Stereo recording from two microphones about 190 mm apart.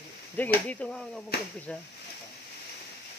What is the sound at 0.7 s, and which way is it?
Speech, 5° left (ahead or behind).